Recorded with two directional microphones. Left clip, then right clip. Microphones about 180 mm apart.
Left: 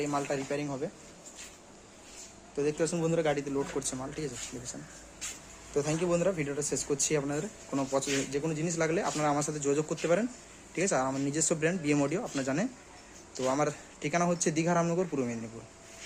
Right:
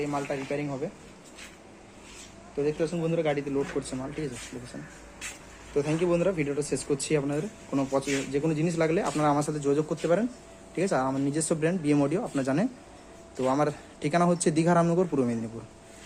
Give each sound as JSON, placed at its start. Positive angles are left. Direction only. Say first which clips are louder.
{"t": 0.0, "sound": "speech", "louder": "right 1 dB", "side_deg": 20}
{"t": 2.6, "sound": "speech", "louder": "right 1 dB", "side_deg": 30}
{"t": 3.2, "sound": "speech", "louder": "right 2 dB", "side_deg": 15}
{"t": 5.7, "sound": "speech", "louder": "right 3 dB", "side_deg": 15}